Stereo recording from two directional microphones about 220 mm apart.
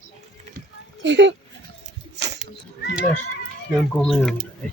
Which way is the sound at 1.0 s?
55° right (ahead or behind).